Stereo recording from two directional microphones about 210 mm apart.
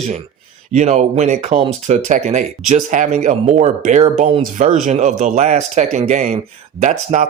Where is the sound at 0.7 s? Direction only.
35° right (ahead or behind).